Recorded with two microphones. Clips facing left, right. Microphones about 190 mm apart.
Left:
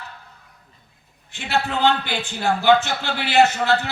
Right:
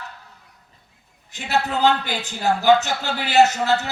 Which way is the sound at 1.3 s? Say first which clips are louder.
Right 1 dB; 40° right (ahead or behind).